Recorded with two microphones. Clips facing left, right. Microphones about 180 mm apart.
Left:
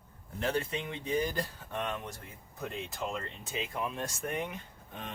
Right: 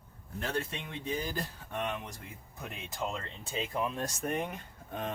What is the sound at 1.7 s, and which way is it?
Speech, 10° right (ahead or behind).